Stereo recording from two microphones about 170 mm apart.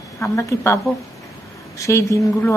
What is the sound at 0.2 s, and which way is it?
Speech, 15° left (ahead or behind).